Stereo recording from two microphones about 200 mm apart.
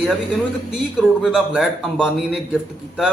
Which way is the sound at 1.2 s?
Centre (ahead or behind).